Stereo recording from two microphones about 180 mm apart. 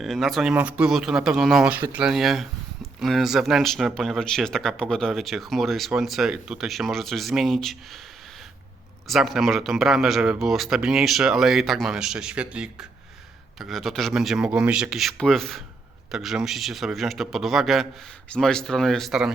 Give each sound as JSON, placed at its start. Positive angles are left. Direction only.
{"t": 0.0, "sound": "speech", "side_deg": 0}
{"t": 9.0, "sound": "speech", "side_deg": 0}